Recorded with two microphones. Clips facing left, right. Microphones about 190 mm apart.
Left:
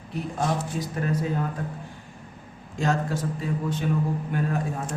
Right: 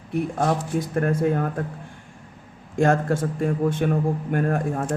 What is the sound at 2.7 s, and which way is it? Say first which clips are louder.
Speech: right 6 dB; 55° right (ahead or behind).